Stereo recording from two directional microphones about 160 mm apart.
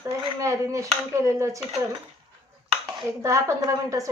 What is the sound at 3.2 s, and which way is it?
Speech, 20° right (ahead or behind).